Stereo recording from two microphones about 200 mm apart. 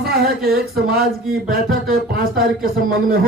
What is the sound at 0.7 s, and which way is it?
Speech, 50° right (ahead or behind).